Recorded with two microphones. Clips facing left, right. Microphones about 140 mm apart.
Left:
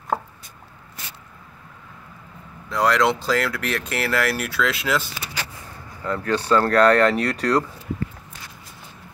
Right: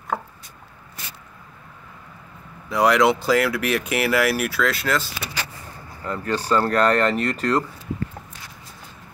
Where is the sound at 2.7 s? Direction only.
10° right (ahead or behind).